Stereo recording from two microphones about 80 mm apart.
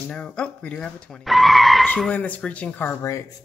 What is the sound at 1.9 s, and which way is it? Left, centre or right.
Speech, centre.